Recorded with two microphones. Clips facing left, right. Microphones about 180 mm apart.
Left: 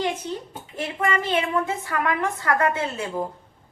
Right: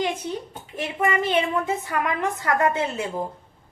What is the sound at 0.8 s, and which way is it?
A woman's voice, 15° right (ahead or behind).